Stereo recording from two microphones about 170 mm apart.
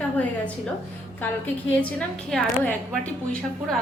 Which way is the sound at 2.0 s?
5° left (ahead or behind).